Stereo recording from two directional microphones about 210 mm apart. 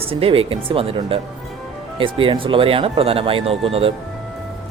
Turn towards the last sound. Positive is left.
turn(degrees=-25)  # may be behind; listen again after turning